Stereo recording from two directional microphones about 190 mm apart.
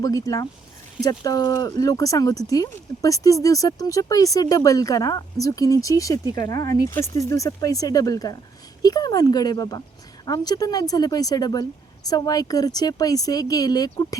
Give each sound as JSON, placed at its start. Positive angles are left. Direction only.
{"t": 0.0, "sound": "speech", "side_deg": 15}